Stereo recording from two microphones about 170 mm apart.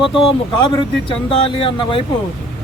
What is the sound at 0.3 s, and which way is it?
Speech, 30° left (ahead or behind).